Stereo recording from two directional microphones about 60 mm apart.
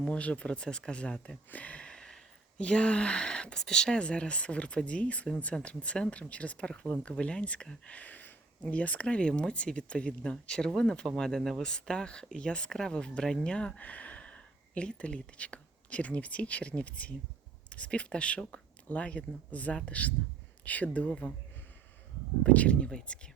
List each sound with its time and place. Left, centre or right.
0.0 s speech: centre
7.9 s a sound: left
8.7 s speech: left
22.4 s speech: left